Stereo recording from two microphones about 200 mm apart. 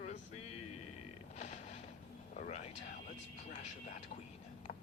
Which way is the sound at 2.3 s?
35° left (ahead or behind).